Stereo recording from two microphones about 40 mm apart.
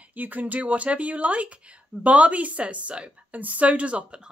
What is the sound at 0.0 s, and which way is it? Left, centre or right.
Speech, right.